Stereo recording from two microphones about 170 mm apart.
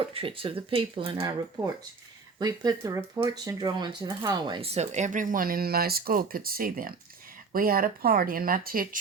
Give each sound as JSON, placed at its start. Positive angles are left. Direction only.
{"t": 0.1, "sound": "speech", "side_deg": -30}
{"t": 2.4, "sound": "speech", "side_deg": -20}